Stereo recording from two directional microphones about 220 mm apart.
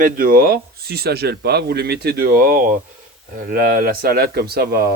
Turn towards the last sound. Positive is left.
turn(degrees=-45)  # may be behind; listen again after turning